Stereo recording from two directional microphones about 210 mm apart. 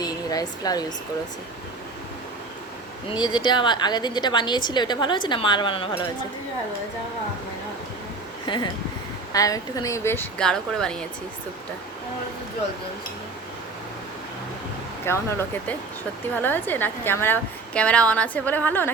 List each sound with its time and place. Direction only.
0.0 s speech: 20° left (ahead or behind)
3.2 s a woman's voice: 20° left (ahead or behind)
8.4 s a woman's voice: 20° left (ahead or behind); by 10.9 s 5° left (ahead or behind)
15.0 s a woman's voice: 10° left (ahead or behind)